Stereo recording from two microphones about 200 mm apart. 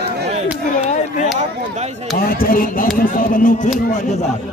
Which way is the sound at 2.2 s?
45° left (ahead or behind).